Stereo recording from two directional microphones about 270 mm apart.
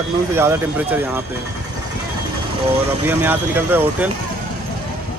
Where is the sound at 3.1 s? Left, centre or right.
Centre.